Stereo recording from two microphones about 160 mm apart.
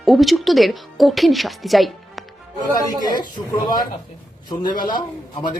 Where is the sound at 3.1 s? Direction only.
25° left (ahead or behind).